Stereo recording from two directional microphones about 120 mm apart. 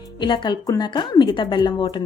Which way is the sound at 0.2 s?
40° left (ahead or behind).